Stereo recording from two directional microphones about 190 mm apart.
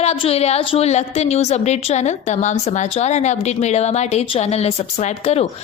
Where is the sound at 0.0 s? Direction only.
30° left (ahead or behind).